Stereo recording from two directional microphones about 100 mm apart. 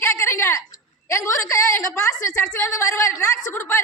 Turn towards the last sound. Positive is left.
turn(degrees=25)  # may be behind; listen again after turning